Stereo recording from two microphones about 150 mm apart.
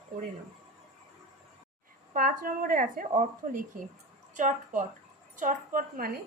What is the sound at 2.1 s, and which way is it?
Speech, 65° right (ahead or behind).